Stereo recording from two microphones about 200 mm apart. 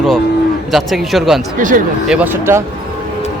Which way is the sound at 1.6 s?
40° right (ahead or behind).